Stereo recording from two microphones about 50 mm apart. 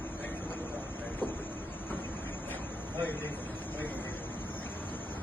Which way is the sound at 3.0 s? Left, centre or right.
Left.